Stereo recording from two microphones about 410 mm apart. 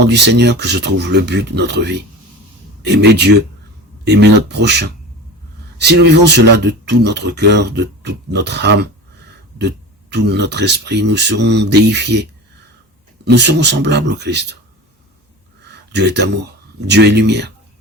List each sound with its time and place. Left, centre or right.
0.0 s speech: right
15.9 s speech: right